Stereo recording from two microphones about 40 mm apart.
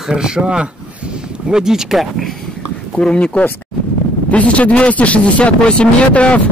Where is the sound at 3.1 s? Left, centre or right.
Left.